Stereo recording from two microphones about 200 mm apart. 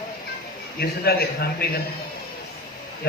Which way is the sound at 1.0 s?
50° left (ahead or behind).